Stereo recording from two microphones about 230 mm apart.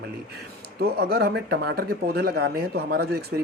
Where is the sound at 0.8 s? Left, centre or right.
Right.